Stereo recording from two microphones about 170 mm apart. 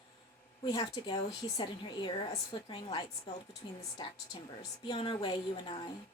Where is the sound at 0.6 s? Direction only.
25° left (ahead or behind).